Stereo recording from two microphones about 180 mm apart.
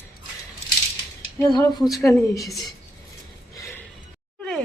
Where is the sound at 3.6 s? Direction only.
15° left (ahead or behind).